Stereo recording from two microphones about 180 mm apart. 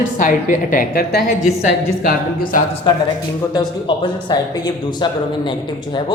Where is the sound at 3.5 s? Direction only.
25° left (ahead or behind).